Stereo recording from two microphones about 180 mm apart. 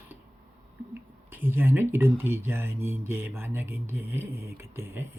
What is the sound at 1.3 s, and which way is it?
Speech, 10° right (ahead or behind).